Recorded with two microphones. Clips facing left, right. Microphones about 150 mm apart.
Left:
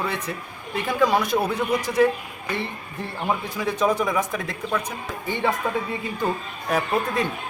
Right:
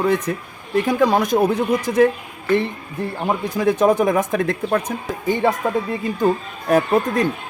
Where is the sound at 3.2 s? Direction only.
45° right (ahead or behind).